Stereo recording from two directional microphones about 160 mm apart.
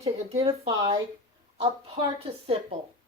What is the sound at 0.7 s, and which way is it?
Speech, 25° right (ahead or behind).